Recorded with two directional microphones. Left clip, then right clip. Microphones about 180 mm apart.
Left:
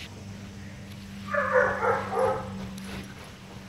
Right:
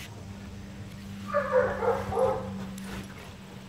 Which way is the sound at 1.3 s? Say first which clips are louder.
Left 1 dB; 20° left (ahead or behind).